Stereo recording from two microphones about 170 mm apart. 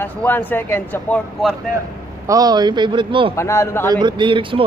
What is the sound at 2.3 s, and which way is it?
A man's voice, 20° right (ahead or behind).